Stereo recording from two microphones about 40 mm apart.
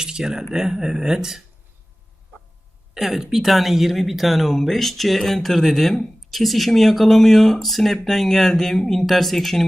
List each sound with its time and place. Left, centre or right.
0.0 s speech: centre
2.9 s speech: centre